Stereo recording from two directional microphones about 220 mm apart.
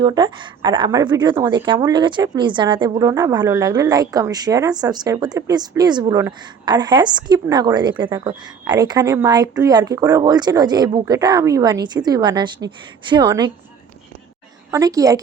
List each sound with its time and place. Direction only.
0.0 s a woman's voice: 20° right (ahead or behind)
14.7 s a woman's voice: 15° right (ahead or behind)